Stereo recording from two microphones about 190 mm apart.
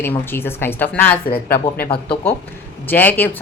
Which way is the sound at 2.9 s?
10° left (ahead or behind).